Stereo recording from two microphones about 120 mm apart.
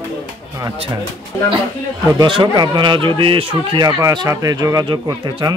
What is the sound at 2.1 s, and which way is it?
Speech, 40° right (ahead or behind).